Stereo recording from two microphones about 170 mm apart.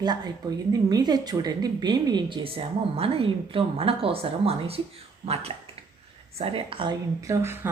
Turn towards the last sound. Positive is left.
turn(degrees=-15)  # may be behind; listen again after turning